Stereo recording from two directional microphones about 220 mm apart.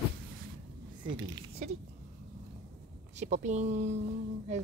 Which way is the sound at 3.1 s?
35° right (ahead or behind).